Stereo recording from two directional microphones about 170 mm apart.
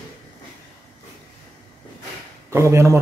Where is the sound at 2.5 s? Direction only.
15° right (ahead or behind).